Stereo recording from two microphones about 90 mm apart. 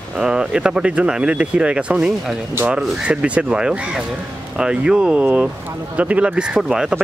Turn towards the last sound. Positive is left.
turn(degrees=-5)  # may be behind; listen again after turning